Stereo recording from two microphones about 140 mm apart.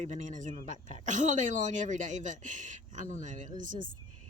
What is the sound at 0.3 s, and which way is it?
A woman's voice, 60° right (ahead or behind).